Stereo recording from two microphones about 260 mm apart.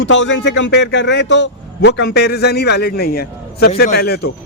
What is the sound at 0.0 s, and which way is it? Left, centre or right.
A man's voice, left.